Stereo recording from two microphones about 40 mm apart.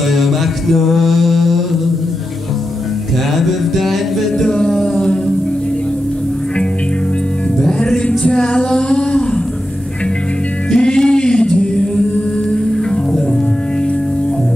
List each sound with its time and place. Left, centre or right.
0.1 s mantra: centre
3.3 s music: centre
4.5 s a capella: centre
7.6 s music: centre
8.4 s a sound: centre
10.7 s music: centre